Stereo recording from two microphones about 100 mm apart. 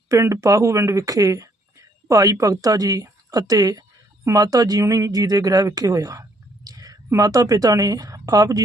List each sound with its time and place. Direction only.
0.1 s a woman's voice: 30° right (ahead or behind)